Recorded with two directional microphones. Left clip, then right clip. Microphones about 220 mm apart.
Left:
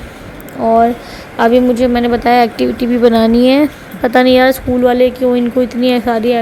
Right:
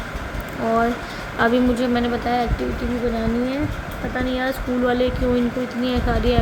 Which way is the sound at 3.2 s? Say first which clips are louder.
Left 14 dB; 40° left (ahead or behind).